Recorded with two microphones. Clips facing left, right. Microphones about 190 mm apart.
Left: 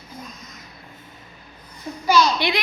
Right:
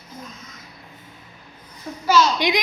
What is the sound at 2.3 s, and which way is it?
Speech, 15° right (ahead or behind).